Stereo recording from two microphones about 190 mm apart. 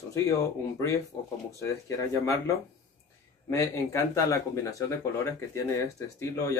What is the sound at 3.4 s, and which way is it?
Speech, 15° left (ahead or behind).